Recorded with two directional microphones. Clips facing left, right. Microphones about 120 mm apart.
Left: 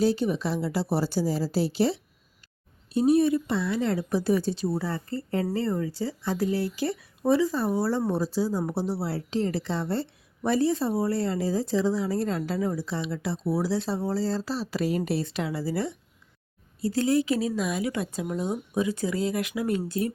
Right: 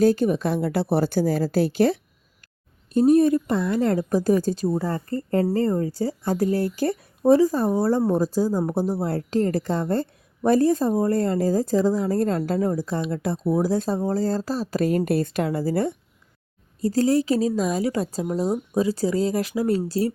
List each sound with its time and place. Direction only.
0.0 s speech: 50° right (ahead or behind)
16.8 s speech: 40° right (ahead or behind)